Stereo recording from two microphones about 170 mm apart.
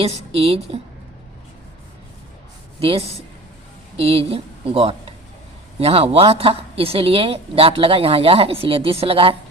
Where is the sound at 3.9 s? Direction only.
35° right (ahead or behind).